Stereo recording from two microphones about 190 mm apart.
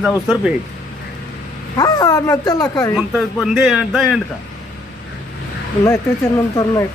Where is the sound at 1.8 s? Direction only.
20° left (ahead or behind).